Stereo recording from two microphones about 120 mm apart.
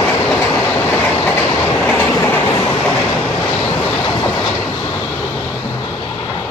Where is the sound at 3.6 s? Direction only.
30° left (ahead or behind).